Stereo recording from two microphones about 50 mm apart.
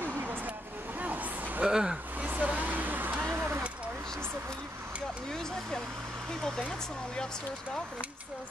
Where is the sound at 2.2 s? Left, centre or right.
Right.